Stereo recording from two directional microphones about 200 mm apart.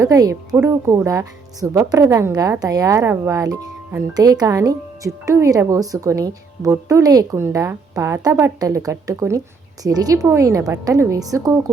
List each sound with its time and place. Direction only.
0.0 s a woman's voice: 15° right (ahead or behind)